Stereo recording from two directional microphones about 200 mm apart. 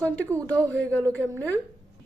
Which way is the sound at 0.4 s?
5° left (ahead or behind).